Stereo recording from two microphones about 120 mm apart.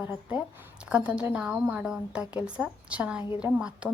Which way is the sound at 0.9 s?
10° right (ahead or behind).